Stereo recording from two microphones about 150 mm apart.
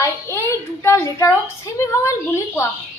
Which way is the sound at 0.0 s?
20° left (ahead or behind).